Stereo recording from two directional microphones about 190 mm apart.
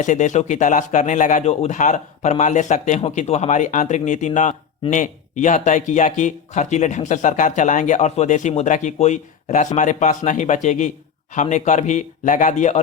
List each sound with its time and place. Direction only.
0.0 s speech: 40° left (ahead or behind)